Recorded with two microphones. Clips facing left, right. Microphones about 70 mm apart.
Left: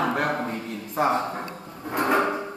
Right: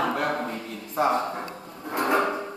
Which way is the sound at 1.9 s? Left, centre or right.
Left.